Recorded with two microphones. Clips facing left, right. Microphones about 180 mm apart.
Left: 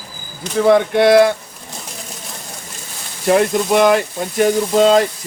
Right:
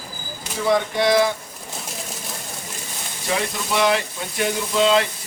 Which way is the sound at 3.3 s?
50° left (ahead or behind).